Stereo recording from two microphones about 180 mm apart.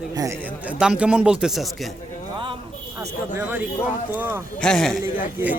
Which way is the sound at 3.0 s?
15° right (ahead or behind).